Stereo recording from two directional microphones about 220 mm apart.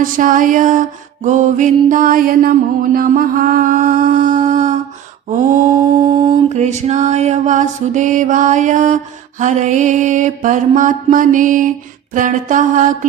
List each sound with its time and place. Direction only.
0.0 s music: 35° right (ahead or behind)
6.2 s music: 30° right (ahead or behind)